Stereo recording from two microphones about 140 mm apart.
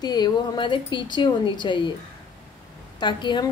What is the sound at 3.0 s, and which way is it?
Speech, 35° left (ahead or behind).